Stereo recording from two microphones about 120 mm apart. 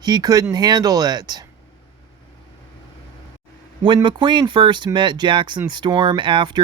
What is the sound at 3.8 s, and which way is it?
Speech, 40° right (ahead or behind).